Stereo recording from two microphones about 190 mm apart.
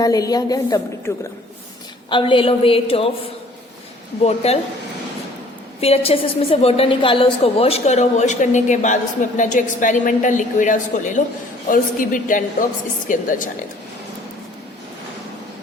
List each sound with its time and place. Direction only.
0.0 s a woman's voice: 20° left (ahead or behind)
4.2 s a woman's voice: 35° left (ahead or behind)
5.8 s a woman's voice: 30° left (ahead or behind)